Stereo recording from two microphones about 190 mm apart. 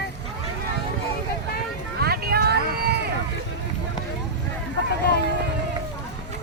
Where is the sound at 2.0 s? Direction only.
55° right (ahead or behind).